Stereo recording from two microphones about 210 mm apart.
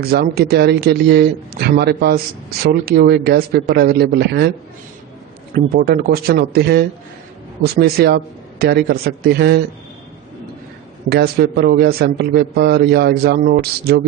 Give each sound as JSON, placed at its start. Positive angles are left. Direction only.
{"t": 0.0, "sound": "a man's voice", "side_deg": -50}
{"t": 5.5, "sound": "a man's voice", "side_deg": -45}
{"t": 11.1, "sound": "a man's voice", "side_deg": -45}